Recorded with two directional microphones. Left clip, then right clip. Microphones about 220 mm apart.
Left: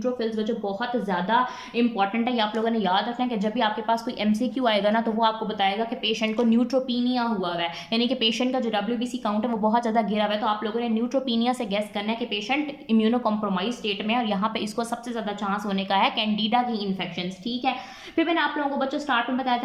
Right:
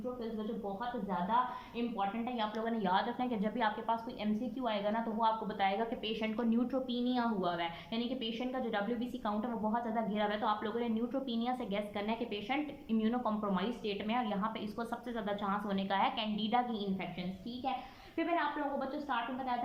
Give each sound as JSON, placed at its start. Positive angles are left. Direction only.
{"t": 1.3, "sound": "a woman's voice", "side_deg": 30}
{"t": 2.6, "sound": "a woman's voice", "side_deg": 10}
{"t": 4.6, "sound": "a woman's voice", "side_deg": 25}
{"t": 5.5, "sound": "a woman's voice", "side_deg": 10}
{"t": 7.9, "sound": "a woman's voice", "side_deg": 20}